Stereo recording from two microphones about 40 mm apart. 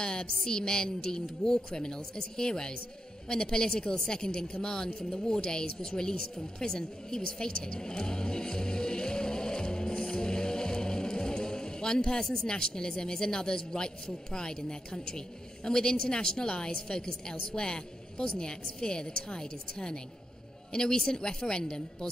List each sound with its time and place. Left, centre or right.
0.0 s a woman's voice: centre